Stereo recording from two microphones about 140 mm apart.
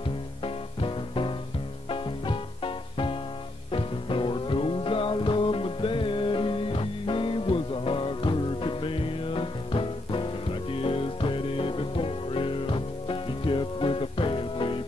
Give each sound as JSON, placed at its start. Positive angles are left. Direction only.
{"t": 0.4, "sound": "music", "side_deg": 40}